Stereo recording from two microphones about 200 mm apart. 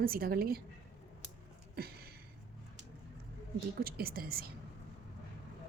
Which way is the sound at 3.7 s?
50° right (ahead or behind).